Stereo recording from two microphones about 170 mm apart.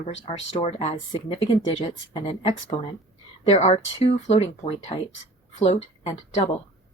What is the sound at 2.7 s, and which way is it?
Speech, 40° left (ahead or behind).